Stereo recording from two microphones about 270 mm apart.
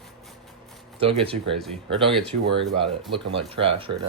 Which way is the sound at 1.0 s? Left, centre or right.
Right.